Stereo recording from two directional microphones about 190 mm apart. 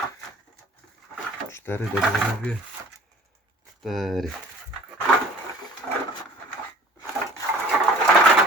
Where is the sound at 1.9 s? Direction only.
Centre (ahead or behind).